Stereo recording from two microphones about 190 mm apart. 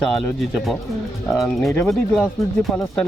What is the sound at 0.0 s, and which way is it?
Speech, centre (ahead or behind).